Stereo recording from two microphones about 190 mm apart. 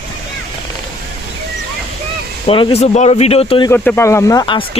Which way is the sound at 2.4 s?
30° left (ahead or behind).